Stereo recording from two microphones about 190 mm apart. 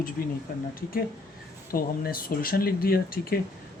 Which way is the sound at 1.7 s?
50° left (ahead or behind).